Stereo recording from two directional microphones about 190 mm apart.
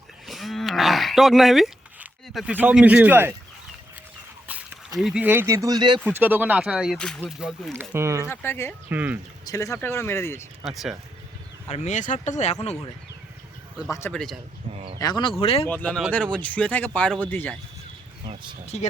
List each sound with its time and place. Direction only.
0.3 s a sound: centre (ahead or behind)
4.4 s dog: 10° right (ahead or behind)
4.9 s speech: 5° right (ahead or behind); by 6.0 s 20° right (ahead or behind)
6.1 s speech: 10° right (ahead or behind)
8.3 s speech: 10° left (ahead or behind)
8.9 s speech: 10° right (ahead or behind)
9.4 s speech: 20° left (ahead or behind)
10.6 s speech: centre (ahead or behind)
11.7 s speech: 40° left (ahead or behind)
14.1 s speech: 5° left (ahead or behind)
14.7 s a sound: 35° right (ahead or behind)
14.9 s speech: 20° left (ahead or behind)
15.6 s speech: 10° left (ahead or behind)